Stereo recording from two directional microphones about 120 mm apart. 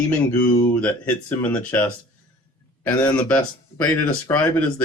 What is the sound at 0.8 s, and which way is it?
Speech, 10° left (ahead or behind).